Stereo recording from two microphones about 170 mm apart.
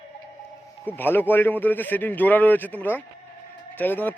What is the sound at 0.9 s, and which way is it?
Speech, 10° left (ahead or behind).